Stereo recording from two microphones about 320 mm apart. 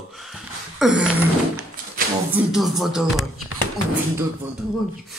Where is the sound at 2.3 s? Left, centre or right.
Centre.